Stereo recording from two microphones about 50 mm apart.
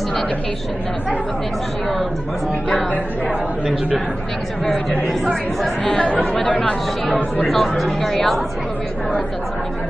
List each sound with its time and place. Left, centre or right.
5.9 s speech: left
7.4 s speech: centre